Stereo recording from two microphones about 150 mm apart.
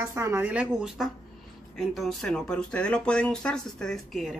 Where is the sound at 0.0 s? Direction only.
20° right (ahead or behind).